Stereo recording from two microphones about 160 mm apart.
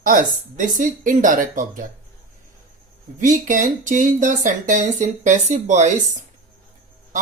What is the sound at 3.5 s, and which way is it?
Speech, 55° right (ahead or behind).